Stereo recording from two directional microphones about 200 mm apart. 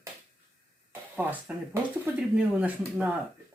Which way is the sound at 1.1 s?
5° right (ahead or behind).